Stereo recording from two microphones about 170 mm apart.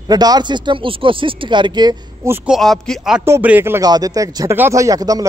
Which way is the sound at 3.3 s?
10° right (ahead or behind).